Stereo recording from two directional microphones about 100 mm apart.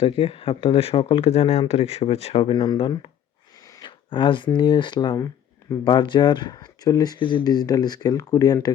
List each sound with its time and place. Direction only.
0.0 s speech: 65° left (ahead or behind)
3.8 s a sound: 55° left (ahead or behind)
4.5 s speech: 50° left (ahead or behind)
7.2 s speech: 55° left (ahead or behind)
7.4 s speech: 40° left (ahead or behind)